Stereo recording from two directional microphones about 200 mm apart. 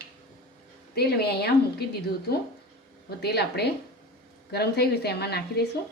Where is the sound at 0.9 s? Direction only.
55° left (ahead or behind).